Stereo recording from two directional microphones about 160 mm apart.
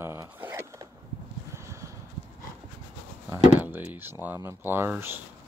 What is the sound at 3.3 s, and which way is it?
Speech, 10° right (ahead or behind).